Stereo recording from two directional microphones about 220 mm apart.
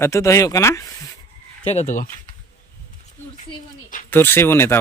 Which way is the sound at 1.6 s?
30° left (ahead or behind).